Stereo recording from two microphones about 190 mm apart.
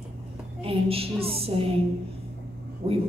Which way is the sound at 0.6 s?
30° right (ahead or behind).